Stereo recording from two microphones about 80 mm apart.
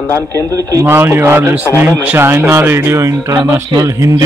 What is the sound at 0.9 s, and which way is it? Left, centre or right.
Speech, right.